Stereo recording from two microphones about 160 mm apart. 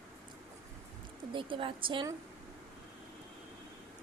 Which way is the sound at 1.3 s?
35° right (ahead or behind).